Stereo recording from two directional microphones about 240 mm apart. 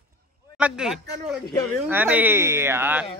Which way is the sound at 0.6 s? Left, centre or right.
Centre.